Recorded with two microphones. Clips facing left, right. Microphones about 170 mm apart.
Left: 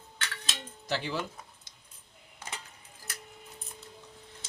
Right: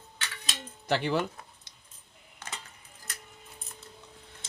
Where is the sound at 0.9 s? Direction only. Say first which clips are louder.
Right 6 dB; 60° right (ahead or behind).